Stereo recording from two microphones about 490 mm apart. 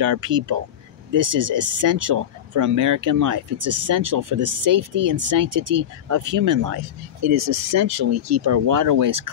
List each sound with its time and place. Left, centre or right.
0.0 s speech: right